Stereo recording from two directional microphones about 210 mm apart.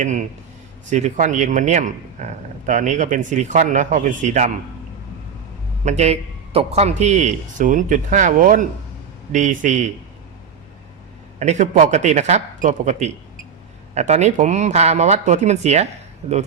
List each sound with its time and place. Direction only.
0.0 s a man's voice: 35° right (ahead or behind)
5.8 s a man's voice: 30° right (ahead or behind)
11.3 s a man's voice: 35° right (ahead or behind)